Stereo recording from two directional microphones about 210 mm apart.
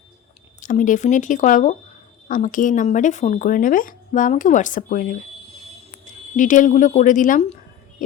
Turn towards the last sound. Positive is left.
turn(degrees=35)  # may be behind; listen again after turning